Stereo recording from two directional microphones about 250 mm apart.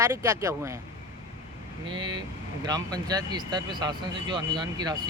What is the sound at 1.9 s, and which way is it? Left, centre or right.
Speech, centre.